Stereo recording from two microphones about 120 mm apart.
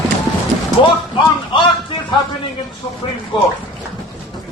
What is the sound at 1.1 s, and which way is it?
A man's voice, 40° left (ahead or behind).